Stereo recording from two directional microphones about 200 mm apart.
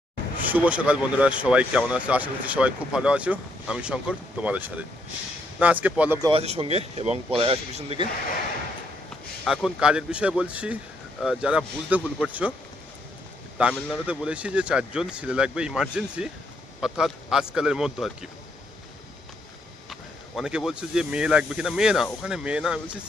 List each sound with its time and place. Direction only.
0.4 s speech: 10° right (ahead or behind)
6.2 s speech: 30° right (ahead or behind)
9.4 s speech: centre (ahead or behind)
13.6 s speech: 5° right (ahead or behind)
19.9 s speech: centre (ahead or behind)